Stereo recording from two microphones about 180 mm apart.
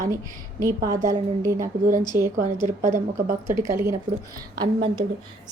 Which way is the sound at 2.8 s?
45° right (ahead or behind).